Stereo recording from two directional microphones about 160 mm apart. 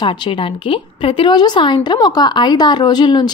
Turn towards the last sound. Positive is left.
turn(degrees=25)  # may be behind; listen again after turning